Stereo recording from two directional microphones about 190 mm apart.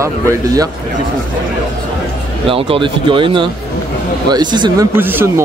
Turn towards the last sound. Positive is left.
turn(degrees=-10)  # may be behind; listen again after turning